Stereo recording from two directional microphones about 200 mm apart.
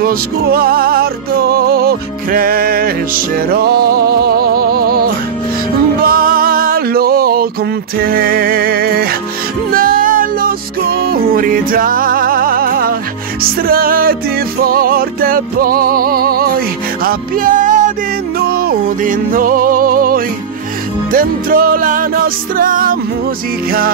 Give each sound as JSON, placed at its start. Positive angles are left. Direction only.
{"t": 0.0, "sound": "music", "side_deg": -50}